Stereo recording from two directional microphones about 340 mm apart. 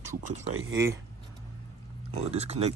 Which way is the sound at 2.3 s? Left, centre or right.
Centre.